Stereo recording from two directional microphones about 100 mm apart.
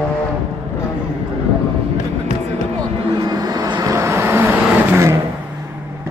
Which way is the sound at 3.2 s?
40° right (ahead or behind).